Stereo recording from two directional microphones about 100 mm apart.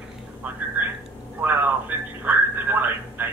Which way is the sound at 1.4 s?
20° right (ahead or behind).